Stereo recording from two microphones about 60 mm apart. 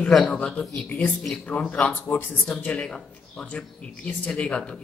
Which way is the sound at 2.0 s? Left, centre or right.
Left.